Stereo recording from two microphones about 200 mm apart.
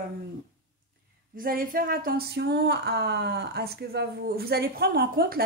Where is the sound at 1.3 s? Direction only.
45° right (ahead or behind).